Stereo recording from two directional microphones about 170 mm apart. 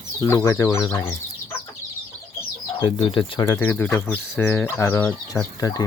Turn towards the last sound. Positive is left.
turn(degrees=20)  # may be behind; listen again after turning